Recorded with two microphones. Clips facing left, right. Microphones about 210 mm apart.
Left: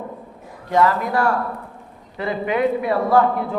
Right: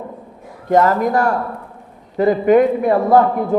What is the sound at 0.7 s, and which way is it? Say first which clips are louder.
A man's voice: right 4 dB; 45° right (ahead or behind).